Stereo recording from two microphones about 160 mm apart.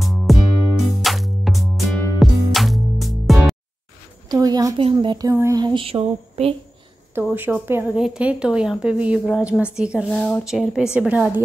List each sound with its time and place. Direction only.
0.0 s music: centre (ahead or behind)
4.3 s a sound: 25° right (ahead or behind)
4.7 s speech: 30° right (ahead or behind)
7.3 s speech: 10° right (ahead or behind)
10.1 s speech: 10° left (ahead or behind)
10.4 s a woman's voice: centre (ahead or behind)